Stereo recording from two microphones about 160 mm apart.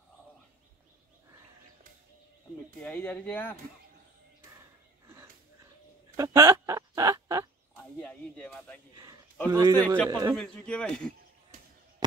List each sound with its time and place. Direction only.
2.8 s speech: 10° left (ahead or behind)
5.0 s a sound: 15° right (ahead or behind)
6.1 s fowl: 20° right (ahead or behind)
8.0 s speech: 5° left (ahead or behind)
8.9 s a man's voice: 25° right (ahead or behind)
10.3 s speech: 5° left (ahead or behind)